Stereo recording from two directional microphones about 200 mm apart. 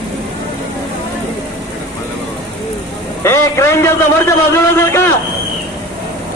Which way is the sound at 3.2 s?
15° left (ahead or behind).